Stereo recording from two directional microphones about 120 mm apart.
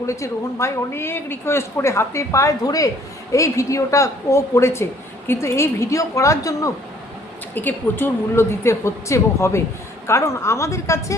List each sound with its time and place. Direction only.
0.0 s speech: 25° left (ahead or behind)
7.5 s speech: 15° left (ahead or behind)